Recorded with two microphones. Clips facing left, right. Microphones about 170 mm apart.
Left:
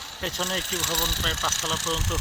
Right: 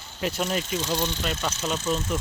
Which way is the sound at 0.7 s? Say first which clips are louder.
Right 4 dB; 70° left (ahead or behind).